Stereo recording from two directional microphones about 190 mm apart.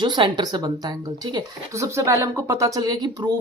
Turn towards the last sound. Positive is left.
turn(degrees=-20)  # may be behind; listen again after turning